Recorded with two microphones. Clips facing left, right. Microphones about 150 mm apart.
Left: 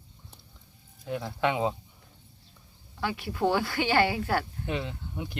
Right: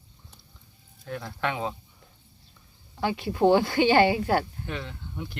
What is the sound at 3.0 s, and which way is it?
Speech, 20° right (ahead or behind).